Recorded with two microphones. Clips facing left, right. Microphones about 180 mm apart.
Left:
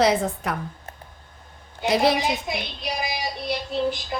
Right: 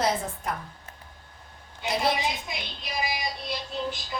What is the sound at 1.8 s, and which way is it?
Speech, 80° left.